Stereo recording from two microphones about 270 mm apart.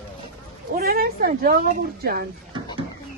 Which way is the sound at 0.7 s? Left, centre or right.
Right.